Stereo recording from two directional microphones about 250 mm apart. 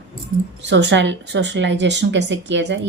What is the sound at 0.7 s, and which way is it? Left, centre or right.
Speech, right.